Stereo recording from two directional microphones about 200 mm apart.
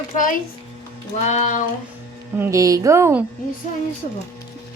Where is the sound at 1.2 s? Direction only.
35° left (ahead or behind).